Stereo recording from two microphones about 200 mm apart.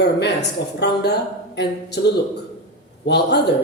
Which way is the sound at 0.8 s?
55° left (ahead or behind).